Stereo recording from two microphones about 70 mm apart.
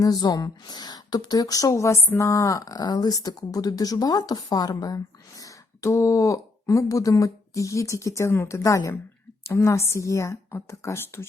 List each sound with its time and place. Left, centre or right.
0.0 s speech: left
5.4 s a woman's voice: left